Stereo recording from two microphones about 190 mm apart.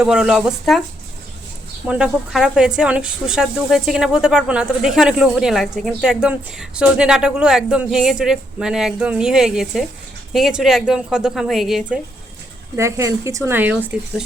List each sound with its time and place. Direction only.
0.0 s speech: 5° right (ahead or behind)
1.9 s speech: 5° right (ahead or behind)
12.7 s speech: 15° right (ahead or behind)